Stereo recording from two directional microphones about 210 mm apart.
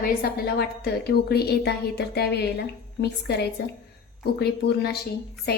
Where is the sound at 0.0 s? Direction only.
45° left (ahead or behind).